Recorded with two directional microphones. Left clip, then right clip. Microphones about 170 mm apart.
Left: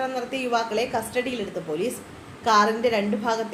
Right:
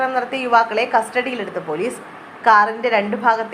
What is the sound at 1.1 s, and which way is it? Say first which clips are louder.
Speech: right 6 dB; 35° right (ahead or behind).